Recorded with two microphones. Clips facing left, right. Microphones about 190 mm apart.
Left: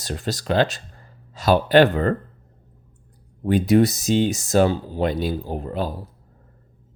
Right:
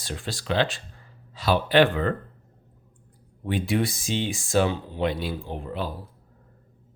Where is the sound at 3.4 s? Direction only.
40° left (ahead or behind).